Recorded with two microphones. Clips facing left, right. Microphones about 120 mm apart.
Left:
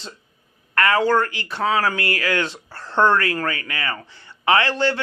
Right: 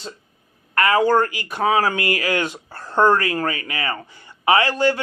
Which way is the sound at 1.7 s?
25° right (ahead or behind).